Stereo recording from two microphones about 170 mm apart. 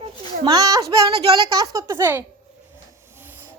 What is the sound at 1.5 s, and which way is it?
Speech, 20° right (ahead or behind).